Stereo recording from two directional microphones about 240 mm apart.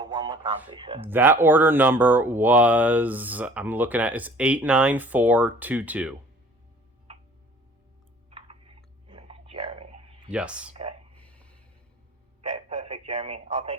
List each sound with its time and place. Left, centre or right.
0.0 s a sound: centre
0.8 s speech: centre
1.0 s speech: centre
8.3 s chewing: right
10.3 s speech: centre
11.2 s a sound: centre
12.4 s telephone: right